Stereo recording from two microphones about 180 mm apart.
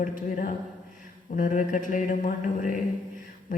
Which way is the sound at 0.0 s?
45° left (ahead or behind).